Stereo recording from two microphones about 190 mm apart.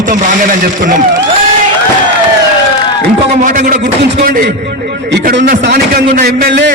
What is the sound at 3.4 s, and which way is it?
Music, 45° right (ahead or behind).